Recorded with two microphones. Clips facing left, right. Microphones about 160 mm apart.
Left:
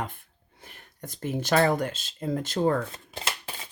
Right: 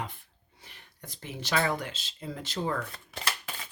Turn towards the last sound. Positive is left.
turn(degrees=25)  # may be behind; listen again after turning